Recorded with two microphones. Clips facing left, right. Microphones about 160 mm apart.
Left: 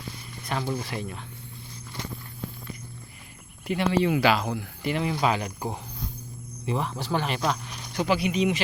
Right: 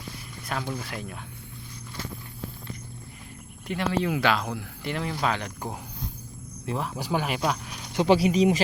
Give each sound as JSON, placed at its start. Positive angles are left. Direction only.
{"t": 0.4, "sound": "speech", "side_deg": 5}
{"t": 3.7, "sound": "speech", "side_deg": 0}
{"t": 7.9, "sound": "speech", "side_deg": -30}